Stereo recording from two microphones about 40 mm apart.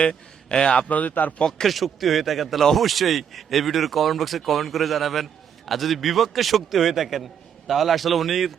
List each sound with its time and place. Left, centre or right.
0.0 s a man's voice: left
0.9 s speech: left
1.6 s speech: centre